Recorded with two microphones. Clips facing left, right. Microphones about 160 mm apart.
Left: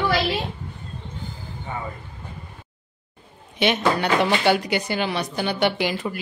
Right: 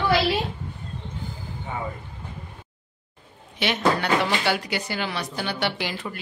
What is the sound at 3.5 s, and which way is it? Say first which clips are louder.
Speech: left 2 dB; 20° left (ahead or behind).